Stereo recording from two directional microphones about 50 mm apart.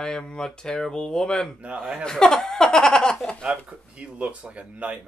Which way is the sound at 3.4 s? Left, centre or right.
Right.